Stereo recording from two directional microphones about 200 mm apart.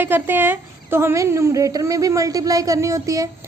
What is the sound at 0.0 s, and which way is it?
A woman's voice, 10° right (ahead or behind).